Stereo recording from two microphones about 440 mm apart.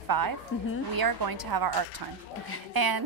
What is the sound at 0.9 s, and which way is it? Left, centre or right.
Speech, right.